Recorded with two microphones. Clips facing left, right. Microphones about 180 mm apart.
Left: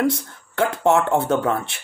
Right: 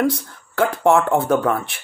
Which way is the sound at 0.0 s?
20° left (ahead or behind).